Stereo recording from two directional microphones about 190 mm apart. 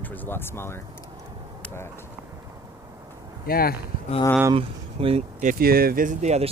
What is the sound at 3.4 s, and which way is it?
Speech, 50° left (ahead or behind).